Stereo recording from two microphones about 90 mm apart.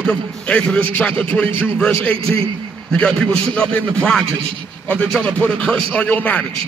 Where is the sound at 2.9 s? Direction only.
10° left (ahead or behind).